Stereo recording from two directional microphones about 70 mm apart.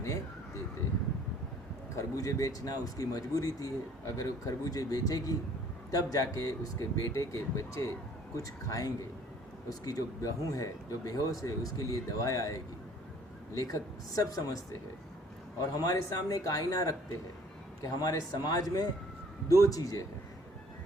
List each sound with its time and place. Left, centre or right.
2.1 s a man's voice: left
15.7 s a man's voice: left